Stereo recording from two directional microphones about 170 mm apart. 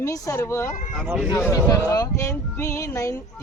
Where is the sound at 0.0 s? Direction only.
20° left (ahead or behind).